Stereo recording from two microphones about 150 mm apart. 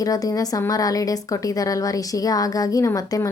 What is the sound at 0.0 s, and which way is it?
Speech, 25° left (ahead or behind).